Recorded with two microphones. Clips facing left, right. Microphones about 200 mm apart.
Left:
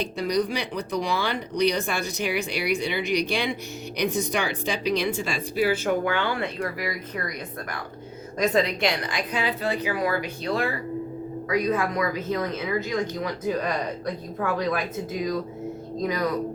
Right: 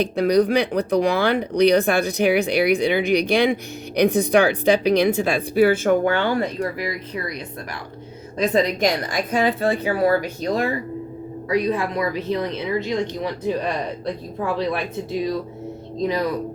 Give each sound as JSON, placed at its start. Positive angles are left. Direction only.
{"t": 0.0, "sound": "speech", "side_deg": -60}
{"t": 8.5, "sound": "a woman's voice", "side_deg": -40}
{"t": 11.4, "sound": "speech", "side_deg": -30}